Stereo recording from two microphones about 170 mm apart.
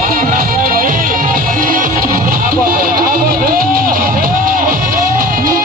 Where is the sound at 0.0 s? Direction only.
60° right (ahead or behind).